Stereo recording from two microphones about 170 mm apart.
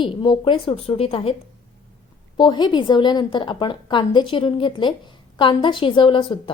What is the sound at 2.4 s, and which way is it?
A woman's voice, 25° left (ahead or behind).